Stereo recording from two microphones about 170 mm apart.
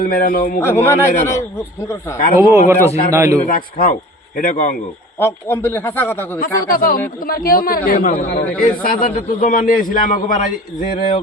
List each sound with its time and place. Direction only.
0.0 s speech: 55° left (ahead or behind)
0.6 s speech: 15° left (ahead or behind)
2.4 s speech: 15° right (ahead or behind)
3.5 s a man's voice: 55° left (ahead or behind)
5.2 s speech: 10° left (ahead or behind)
6.4 s a man's voice: 55° left (ahead or behind)